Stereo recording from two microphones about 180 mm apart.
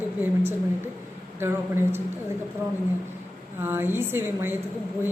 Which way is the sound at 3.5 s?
10° right (ahead or behind).